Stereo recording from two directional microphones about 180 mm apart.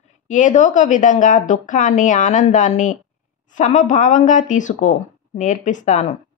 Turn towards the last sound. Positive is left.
turn(degrees=40)  # may be behind; listen again after turning